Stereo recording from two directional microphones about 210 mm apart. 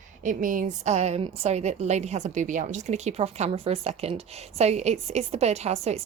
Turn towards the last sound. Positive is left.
turn(degrees=-30)  # may be behind; listen again after turning